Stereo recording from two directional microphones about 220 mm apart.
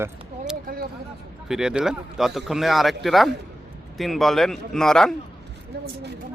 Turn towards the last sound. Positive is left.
turn(degrees=0)  # may be behind; listen again after turning